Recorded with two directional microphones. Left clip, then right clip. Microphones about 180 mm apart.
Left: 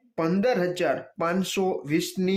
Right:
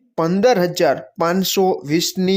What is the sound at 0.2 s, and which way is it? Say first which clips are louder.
Speech: right 9 dB; 35° right (ahead or behind).